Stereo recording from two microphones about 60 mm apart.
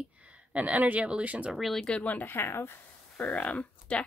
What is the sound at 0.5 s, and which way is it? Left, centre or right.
Speech, right.